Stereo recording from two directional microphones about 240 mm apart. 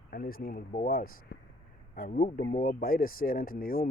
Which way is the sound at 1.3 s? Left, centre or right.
Left.